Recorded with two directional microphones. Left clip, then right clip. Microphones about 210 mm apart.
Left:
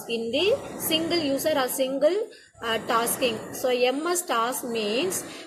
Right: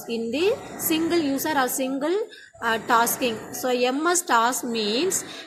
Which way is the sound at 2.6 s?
45° right (ahead or behind).